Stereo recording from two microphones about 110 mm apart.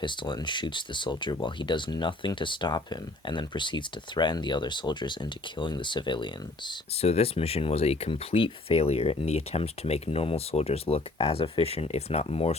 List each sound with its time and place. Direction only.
0.0 s speech: 45° left (ahead or behind)
7.0 s speech: 70° left (ahead or behind)